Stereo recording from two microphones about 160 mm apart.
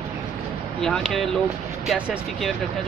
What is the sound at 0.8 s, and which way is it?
Speech, 5° left (ahead or behind).